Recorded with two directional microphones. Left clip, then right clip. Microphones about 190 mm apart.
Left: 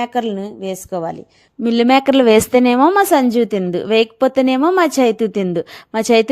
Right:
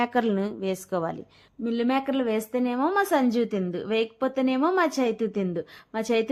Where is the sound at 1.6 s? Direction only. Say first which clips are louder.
Left 13 dB; 50° left (ahead or behind).